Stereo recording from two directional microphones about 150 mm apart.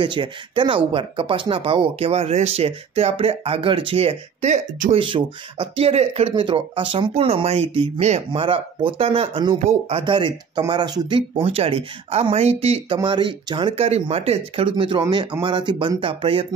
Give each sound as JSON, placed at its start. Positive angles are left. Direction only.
{"t": 0.0, "sound": "speech", "side_deg": -35}
{"t": 4.9, "sound": "speech", "side_deg": -35}
{"t": 6.3, "sound": "speech", "side_deg": -35}
{"t": 9.6, "sound": "speech", "side_deg": -45}